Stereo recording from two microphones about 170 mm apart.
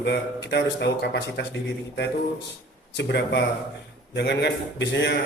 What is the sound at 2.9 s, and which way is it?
Speech, 90° left.